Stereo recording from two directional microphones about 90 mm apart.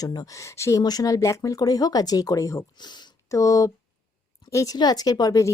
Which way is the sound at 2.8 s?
55° left (ahead or behind).